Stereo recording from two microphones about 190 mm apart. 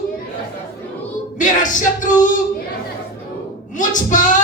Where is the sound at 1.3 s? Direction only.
40° left (ahead or behind).